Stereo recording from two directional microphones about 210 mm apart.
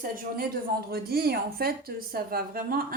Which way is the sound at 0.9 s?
45° right (ahead or behind).